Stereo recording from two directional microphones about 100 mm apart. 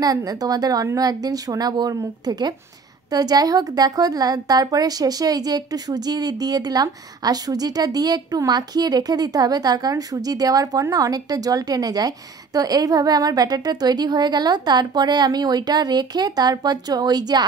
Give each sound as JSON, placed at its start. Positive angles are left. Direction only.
{"t": 0.0, "sound": "a woman's voice", "side_deg": -40}